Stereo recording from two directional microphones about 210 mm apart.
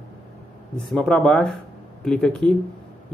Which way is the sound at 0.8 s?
5° left (ahead or behind).